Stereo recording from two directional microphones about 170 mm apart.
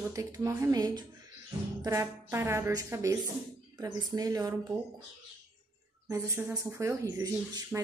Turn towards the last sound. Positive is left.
turn(degrees=-20)  # may be behind; listen again after turning